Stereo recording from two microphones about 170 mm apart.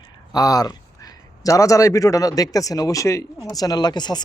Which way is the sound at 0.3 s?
20° left (ahead or behind).